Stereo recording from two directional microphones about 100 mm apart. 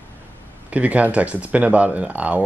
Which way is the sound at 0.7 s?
15° right (ahead or behind).